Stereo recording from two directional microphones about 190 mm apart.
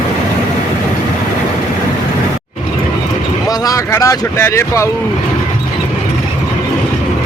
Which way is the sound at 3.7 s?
15° left (ahead or behind).